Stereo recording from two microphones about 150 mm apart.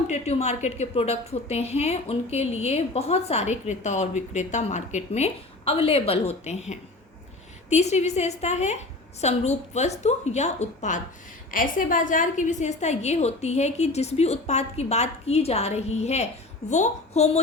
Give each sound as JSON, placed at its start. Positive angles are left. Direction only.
{"t": 0.1, "sound": "a woman's voice", "side_deg": 45}
{"t": 11.5, "sound": "a woman's voice", "side_deg": 65}